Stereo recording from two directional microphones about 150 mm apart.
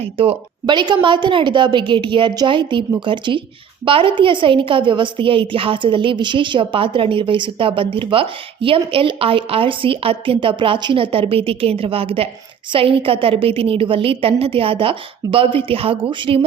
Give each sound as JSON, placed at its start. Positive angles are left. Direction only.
{"t": 0.0, "sound": "a woman's voice", "side_deg": -40}
{"t": 0.6, "sound": "a woman's voice", "side_deg": -30}